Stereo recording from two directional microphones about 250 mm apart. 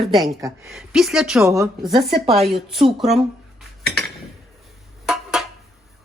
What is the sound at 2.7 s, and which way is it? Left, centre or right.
Speech, centre.